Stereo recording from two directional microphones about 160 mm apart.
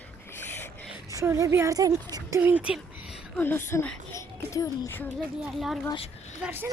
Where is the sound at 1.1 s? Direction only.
20° right (ahead or behind).